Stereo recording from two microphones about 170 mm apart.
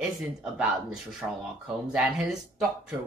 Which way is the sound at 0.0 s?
5° right (ahead or behind).